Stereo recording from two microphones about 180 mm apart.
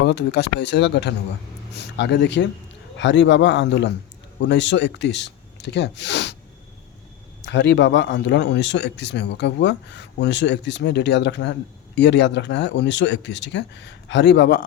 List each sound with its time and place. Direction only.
0.0 s a man's voice: 70° left (ahead or behind)
7.4 s speech: 80° left